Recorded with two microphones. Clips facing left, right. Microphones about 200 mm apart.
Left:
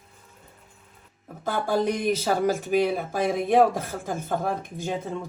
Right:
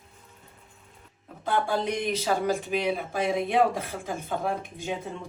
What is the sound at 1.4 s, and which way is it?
Speech, 45° left (ahead or behind).